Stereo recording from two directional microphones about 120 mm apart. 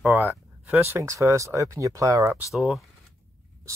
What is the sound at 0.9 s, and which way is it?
Speech, 25° right (ahead or behind).